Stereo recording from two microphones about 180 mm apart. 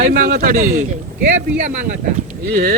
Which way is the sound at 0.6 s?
40° right (ahead or behind).